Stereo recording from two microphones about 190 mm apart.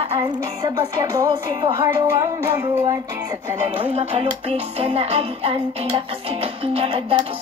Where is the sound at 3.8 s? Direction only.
30° right (ahead or behind).